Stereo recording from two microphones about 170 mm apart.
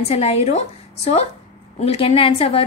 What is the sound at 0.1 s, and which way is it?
A woman's voice, 35° left (ahead or behind).